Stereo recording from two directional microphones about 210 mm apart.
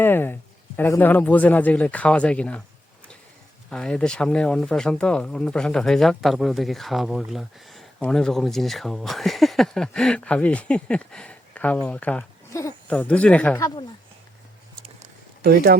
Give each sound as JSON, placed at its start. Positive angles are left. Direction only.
{"t": 0.0, "sound": "speech", "side_deg": 10}
{"t": 3.7, "sound": "speech", "side_deg": 5}
{"t": 15.4, "sound": "speech", "side_deg": -50}